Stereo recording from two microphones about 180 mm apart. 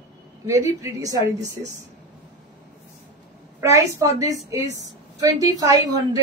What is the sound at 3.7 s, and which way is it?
A woman's voice, 15° right (ahead or behind).